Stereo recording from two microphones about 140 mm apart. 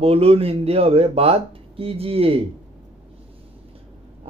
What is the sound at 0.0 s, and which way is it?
A man's voice, 45° right (ahead or behind).